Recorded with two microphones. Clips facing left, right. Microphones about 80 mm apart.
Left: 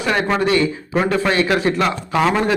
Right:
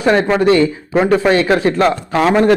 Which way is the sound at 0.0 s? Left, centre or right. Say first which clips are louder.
Right 6 dB; right.